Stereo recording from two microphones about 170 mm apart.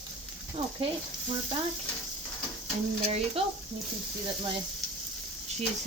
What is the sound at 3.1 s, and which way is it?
Speech, 35° right (ahead or behind).